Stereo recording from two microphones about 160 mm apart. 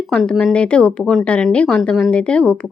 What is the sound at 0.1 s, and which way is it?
A woman's voice, 5° left (ahead or behind).